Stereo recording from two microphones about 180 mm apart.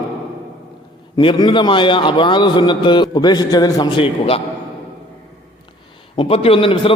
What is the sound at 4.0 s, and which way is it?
Speech, 30° left (ahead or behind).